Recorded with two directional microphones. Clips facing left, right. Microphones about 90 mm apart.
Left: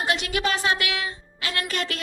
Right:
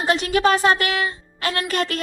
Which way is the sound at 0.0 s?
35° right (ahead or behind).